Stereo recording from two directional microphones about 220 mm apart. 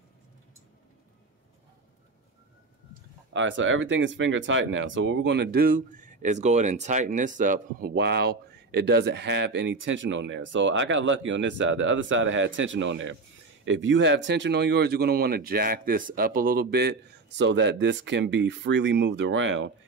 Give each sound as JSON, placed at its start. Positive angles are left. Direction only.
{"t": 3.3, "sound": "speech", "side_deg": -55}